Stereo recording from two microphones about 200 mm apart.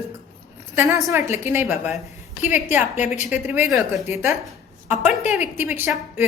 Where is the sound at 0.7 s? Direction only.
15° right (ahead or behind).